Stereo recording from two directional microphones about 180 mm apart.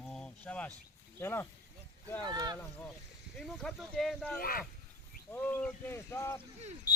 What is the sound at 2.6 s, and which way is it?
Speech, 10° left (ahead or behind).